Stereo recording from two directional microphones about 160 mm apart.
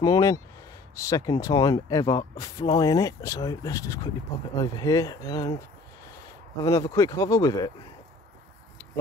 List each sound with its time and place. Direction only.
0.0 s speech: 20° left (ahead or behind)
6.6 s speech: 20° left (ahead or behind)